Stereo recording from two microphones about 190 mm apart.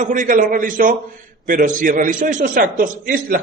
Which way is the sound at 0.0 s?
45° right (ahead or behind).